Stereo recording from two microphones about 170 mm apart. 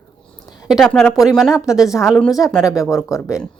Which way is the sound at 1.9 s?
15° left (ahead or behind).